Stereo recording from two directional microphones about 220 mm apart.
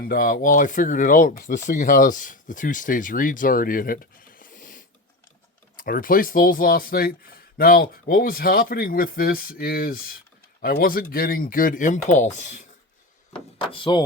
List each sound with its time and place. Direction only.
0.0 s speech: 40° left (ahead or behind)
13.3 s speech: 25° left (ahead or behind)